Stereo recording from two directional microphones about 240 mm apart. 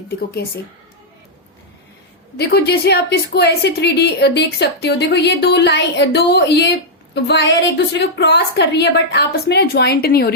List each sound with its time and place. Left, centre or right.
0.4 s a woman's voice: left
2.4 s a woman's voice: left